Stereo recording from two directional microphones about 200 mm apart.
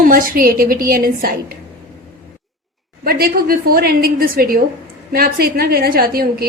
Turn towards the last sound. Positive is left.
turn(degrees=-50)  # may be behind; listen again after turning